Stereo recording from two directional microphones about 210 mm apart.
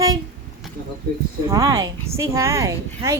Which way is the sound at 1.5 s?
15° right (ahead or behind).